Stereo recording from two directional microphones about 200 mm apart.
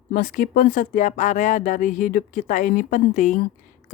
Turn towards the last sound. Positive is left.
turn(degrees=35)  # may be behind; listen again after turning